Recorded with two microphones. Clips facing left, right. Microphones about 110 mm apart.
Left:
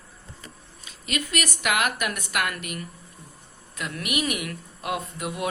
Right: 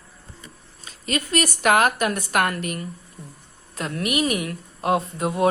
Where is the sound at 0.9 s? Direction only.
40° right (ahead or behind).